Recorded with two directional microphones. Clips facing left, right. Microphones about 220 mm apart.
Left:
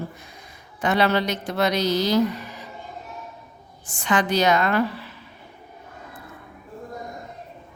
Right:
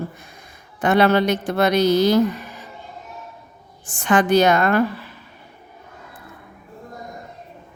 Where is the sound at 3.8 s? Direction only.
50° right (ahead or behind).